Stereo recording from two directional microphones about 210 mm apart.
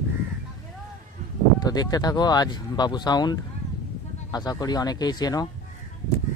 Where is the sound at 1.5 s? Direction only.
20° left (ahead or behind).